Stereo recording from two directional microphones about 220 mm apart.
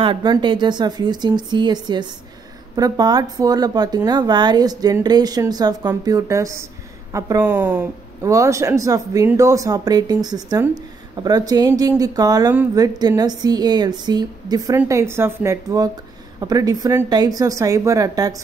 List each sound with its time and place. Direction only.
0.0 s speech: 20° right (ahead or behind)